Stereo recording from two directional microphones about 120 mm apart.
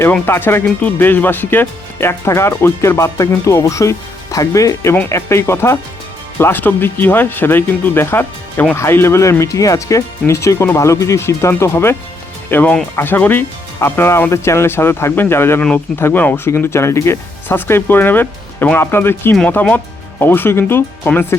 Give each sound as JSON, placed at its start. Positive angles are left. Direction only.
{"t": 0.1, "sound": "speech", "side_deg": 15}